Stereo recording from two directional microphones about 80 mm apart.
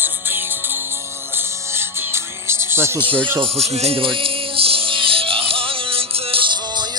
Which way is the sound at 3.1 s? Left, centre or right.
Right.